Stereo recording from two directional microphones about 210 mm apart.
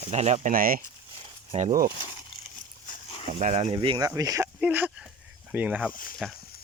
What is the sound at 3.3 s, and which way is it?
Speech, 35° right (ahead or behind).